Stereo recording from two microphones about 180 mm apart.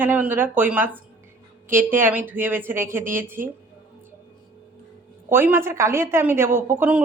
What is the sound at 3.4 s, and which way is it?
Speech, 50° right (ahead or behind).